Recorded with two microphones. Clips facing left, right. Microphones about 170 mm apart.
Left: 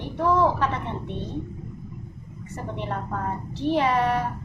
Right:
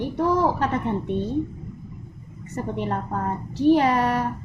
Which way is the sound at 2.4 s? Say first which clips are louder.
Right 5 dB; 40° right (ahead or behind).